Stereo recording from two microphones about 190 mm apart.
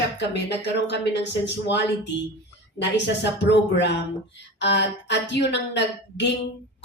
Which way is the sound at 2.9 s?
70° left (ahead or behind).